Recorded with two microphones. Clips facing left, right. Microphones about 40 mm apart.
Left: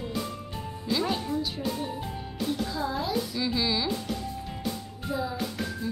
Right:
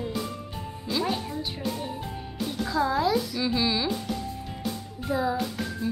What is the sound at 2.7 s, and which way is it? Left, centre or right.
Speech, right.